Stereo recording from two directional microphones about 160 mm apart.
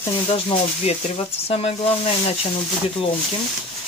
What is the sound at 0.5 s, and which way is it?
Speech, 40° left (ahead or behind).